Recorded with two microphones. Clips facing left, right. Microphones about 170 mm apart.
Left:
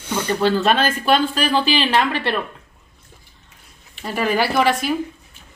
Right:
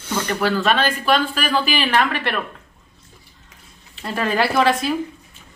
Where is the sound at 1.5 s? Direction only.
25° left (ahead or behind).